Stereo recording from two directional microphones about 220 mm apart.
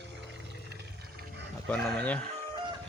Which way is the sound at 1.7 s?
5° left (ahead or behind).